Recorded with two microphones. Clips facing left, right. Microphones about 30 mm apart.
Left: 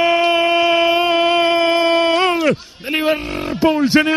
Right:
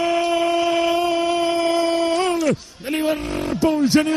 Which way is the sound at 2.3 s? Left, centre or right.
Left.